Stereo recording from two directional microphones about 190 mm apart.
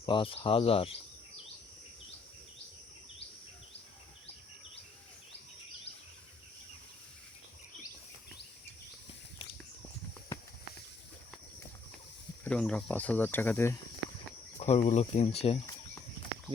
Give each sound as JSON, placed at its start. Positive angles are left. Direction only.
{"t": 0.0, "sound": "cricket", "side_deg": 30}
{"t": 12.5, "sound": "speech", "side_deg": 5}
{"t": 14.6, "sound": "speech", "side_deg": 35}